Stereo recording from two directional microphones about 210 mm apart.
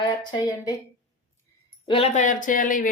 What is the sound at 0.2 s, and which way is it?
Speech, 20° left (ahead or behind).